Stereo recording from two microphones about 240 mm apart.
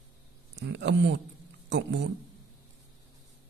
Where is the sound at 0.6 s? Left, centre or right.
Right.